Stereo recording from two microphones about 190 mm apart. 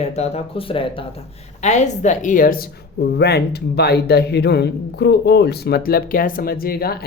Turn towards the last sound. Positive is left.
turn(degrees=55)  # may be behind; listen again after turning